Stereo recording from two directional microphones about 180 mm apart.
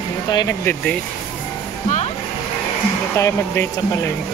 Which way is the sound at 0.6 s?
5° left (ahead or behind).